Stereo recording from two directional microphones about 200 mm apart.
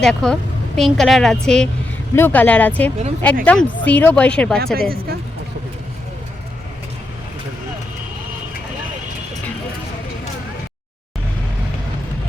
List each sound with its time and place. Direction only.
0.0 s speech: 5° left (ahead or behind)
4.6 s speech: 50° right (ahead or behind)